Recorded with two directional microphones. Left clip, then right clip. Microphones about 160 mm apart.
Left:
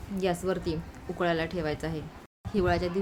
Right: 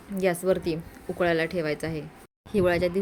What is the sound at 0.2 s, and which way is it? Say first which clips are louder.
Speech: right 5 dB; 25° right (ahead or behind).